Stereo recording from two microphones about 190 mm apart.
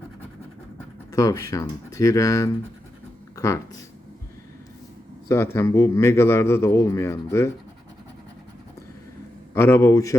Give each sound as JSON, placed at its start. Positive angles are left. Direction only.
{"t": 1.1, "sound": "speech", "side_deg": 20}
{"t": 5.3, "sound": "speech", "side_deg": 15}
{"t": 9.6, "sound": "speech", "side_deg": 15}